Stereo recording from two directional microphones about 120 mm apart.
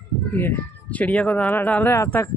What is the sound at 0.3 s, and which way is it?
Speech, 15° left (ahead or behind).